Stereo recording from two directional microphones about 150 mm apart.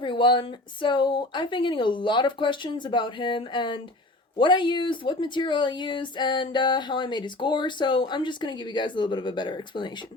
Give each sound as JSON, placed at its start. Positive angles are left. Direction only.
{"t": 0.0, "sound": "speech", "side_deg": 30}